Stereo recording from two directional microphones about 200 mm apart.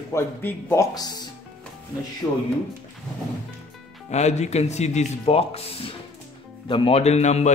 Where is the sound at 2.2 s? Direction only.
15° left (ahead or behind).